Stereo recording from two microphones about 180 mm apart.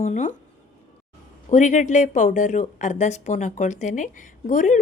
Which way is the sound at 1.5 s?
45° left (ahead or behind).